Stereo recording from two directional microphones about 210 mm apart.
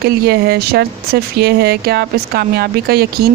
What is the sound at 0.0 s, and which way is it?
Speech, 50° right (ahead or behind).